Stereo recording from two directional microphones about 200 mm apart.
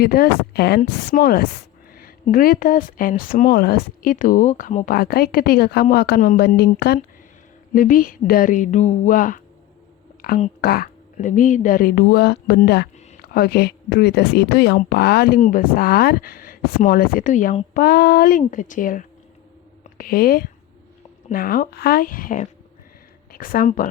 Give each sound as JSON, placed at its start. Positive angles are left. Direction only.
{"t": 0.0, "sound": "a woman's voice", "side_deg": 50}
{"t": 1.9, "sound": "a sound", "side_deg": 45}
{"t": 2.3, "sound": "a woman's voice", "side_deg": 45}
{"t": 7.7, "sound": "a woman's voice", "side_deg": 45}
{"t": 15.4, "sound": "a woman's voice", "side_deg": 40}
{"t": 17.7, "sound": "a woman's voice", "side_deg": 50}
{"t": 19.8, "sound": "a sound", "side_deg": 45}
{"t": 21.2, "sound": "a woman's voice", "side_deg": 45}